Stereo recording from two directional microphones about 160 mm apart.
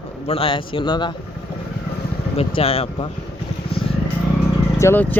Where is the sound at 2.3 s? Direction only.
40° left (ahead or behind).